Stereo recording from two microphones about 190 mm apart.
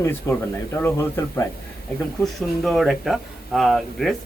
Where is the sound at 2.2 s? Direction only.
Centre (ahead or behind).